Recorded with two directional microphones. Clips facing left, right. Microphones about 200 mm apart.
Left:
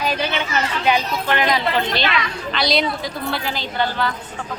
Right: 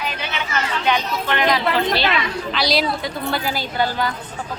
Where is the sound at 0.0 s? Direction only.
35° left (ahead or behind).